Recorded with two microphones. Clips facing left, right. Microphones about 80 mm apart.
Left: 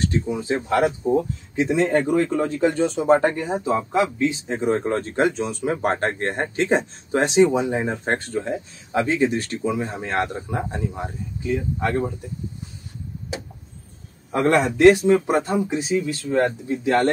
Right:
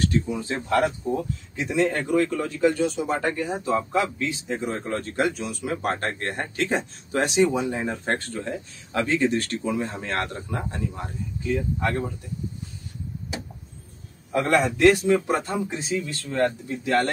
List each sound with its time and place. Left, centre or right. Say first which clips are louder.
0.0 s speech: left 1 dB; left
1.0 s speech: left 6 dB; left
4.3 s speech: left 6 dB; left
14.3 s speech: left 3 dB; left